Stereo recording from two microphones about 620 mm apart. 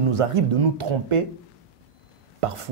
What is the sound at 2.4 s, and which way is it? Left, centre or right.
Speech, right.